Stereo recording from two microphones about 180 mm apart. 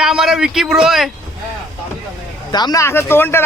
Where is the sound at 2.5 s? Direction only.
20° left (ahead or behind).